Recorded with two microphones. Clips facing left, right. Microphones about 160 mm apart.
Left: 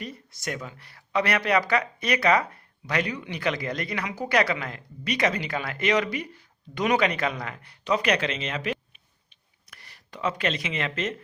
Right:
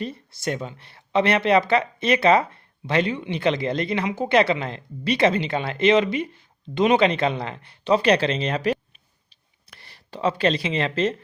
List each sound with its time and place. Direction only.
0.0 s speech: 30° right (ahead or behind)